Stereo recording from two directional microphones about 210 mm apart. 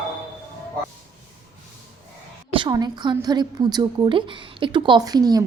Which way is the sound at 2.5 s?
20° right (ahead or behind).